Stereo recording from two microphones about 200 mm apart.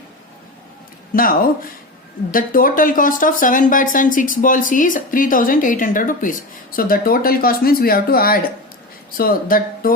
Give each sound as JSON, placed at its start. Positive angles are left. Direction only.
{"t": 1.1, "sound": "speech", "side_deg": 45}
{"t": 2.3, "sound": "speech", "side_deg": 45}